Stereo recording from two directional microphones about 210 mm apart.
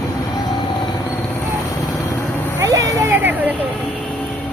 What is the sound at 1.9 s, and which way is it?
Vehicle, 15° left (ahead or behind).